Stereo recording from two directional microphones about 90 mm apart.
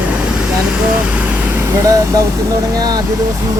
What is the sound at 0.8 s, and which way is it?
Speech, 15° right (ahead or behind).